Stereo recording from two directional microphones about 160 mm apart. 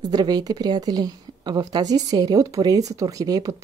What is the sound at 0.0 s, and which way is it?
Speech, 25° right (ahead or behind).